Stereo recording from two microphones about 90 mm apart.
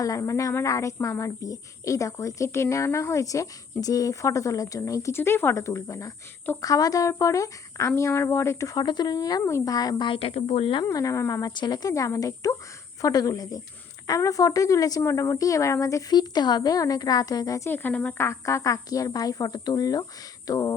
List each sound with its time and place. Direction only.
0.0 s a woman's voice: 35° left (ahead or behind)
8.8 s speech: 55° left (ahead or behind)
9.4 s speech: 30° left (ahead or behind)
9.6 s speech: 45° left (ahead or behind)
10.1 s speech: 90° left
10.8 s a woman's voice: 35° left (ahead or behind)
11.5 s a woman's voice: 55° left (ahead or behind)
17.7 s speech: 20° left (ahead or behind)
18.2 s a woman's voice: 30° left (ahead or behind)